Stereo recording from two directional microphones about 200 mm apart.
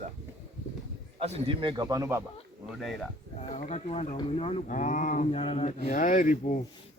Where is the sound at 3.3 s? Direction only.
30° left (ahead or behind).